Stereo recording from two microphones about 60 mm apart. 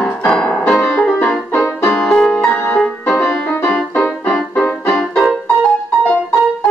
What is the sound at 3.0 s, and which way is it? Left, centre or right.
Music, centre.